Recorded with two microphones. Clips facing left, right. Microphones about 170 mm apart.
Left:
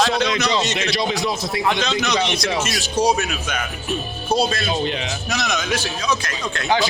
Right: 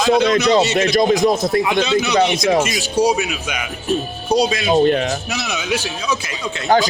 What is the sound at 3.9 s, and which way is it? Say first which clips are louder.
Speech: right 6 dB; 40° right (ahead or behind).